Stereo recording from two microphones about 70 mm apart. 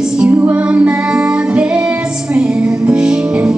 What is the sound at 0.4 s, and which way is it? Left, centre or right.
Music, right.